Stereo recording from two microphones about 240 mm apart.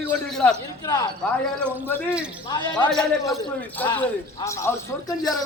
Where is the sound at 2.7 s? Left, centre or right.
Centre.